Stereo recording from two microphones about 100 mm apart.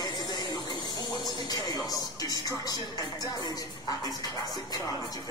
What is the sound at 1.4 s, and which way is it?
Speech, 45° left (ahead or behind).